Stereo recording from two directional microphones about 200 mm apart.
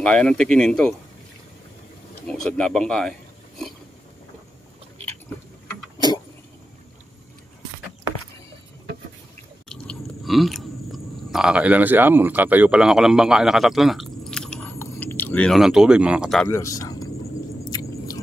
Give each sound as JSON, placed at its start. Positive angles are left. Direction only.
{"t": 0.0, "sound": "speech", "side_deg": 5}
{"t": 2.2, "sound": "speech", "side_deg": 5}
{"t": 9.7, "sound": "chewing", "side_deg": 0}
{"t": 16.5, "sound": "speech", "side_deg": 15}
{"t": 17.6, "sound": "chewing", "side_deg": 20}